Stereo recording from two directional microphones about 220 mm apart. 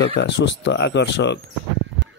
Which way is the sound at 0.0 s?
55° left (ahead or behind).